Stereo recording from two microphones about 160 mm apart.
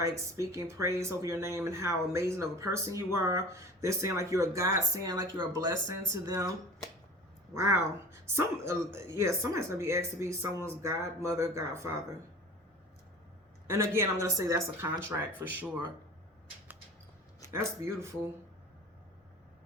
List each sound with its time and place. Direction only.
0.0 s speech: 20° right (ahead or behind)
7.5 s speech: 20° right (ahead or behind)
13.7 s speech: 15° right (ahead or behind)
17.5 s speech: 15° right (ahead or behind)